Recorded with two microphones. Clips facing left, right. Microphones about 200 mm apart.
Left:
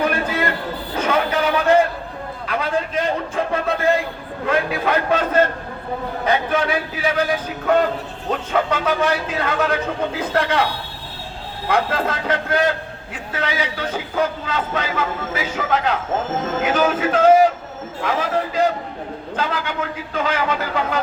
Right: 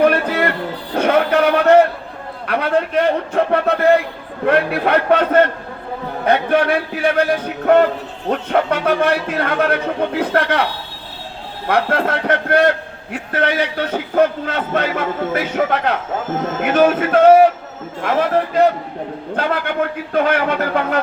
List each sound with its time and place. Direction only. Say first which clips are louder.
0.0 s music: right 6 dB; 65° right (ahead or behind)
0.9 s a sound: right 6 dB; 65° right (ahead or behind)
2.5 s a man's voice: right 5 dB; 65° right (ahead or behind)
11.7 s a man's voice: right 3 dB; 60° right (ahead or behind)